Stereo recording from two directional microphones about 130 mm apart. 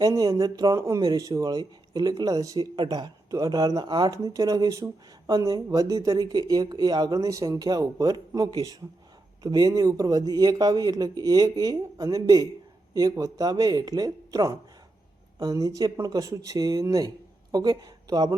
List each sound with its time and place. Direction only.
0.0 s speech: 30° right (ahead or behind)